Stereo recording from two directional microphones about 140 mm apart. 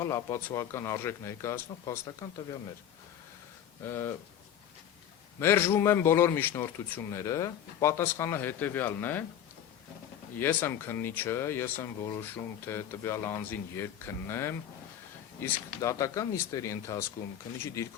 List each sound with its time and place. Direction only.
0.0 s a man's voice: 20° left (ahead or behind)
3.8 s speech: 15° left (ahead or behind)
5.4 s speech: 15° left (ahead or behind)
10.4 s a man's voice: 15° left (ahead or behind)